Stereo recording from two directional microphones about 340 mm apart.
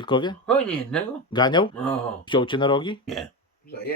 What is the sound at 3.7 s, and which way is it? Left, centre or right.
Speech, left.